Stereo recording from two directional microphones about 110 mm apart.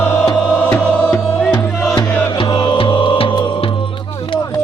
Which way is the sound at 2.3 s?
45° left (ahead or behind).